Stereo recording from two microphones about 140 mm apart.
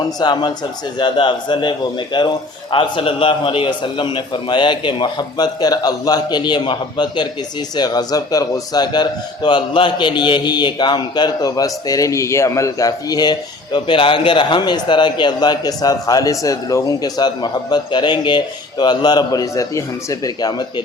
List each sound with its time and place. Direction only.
0.2 s a man's voice: 30° left (ahead or behind)